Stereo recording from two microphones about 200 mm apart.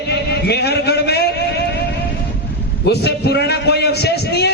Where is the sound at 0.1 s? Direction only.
55° left (ahead or behind).